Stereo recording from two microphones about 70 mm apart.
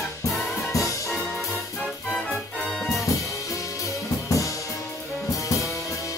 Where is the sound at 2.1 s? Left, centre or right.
Centre.